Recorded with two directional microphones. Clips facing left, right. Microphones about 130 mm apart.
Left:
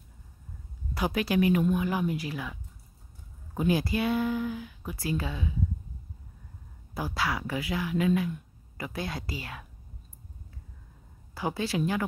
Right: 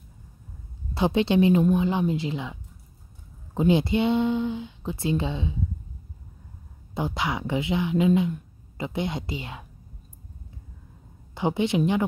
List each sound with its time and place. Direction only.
0.9 s speech: 25° right (ahead or behind)
6.9 s speech: 25° right (ahead or behind)
11.3 s speech: 20° right (ahead or behind)